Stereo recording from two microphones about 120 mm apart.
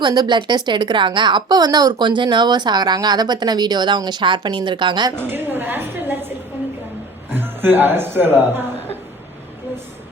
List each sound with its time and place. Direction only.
0.0 s a woman's voice: 35° right (ahead or behind)
5.3 s a sound: 15° right (ahead or behind)
7.3 s speech: 15° right (ahead or behind)